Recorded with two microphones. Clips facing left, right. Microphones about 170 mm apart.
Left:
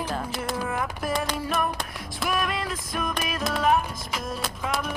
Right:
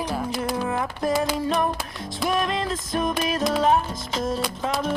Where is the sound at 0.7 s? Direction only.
25° right (ahead or behind).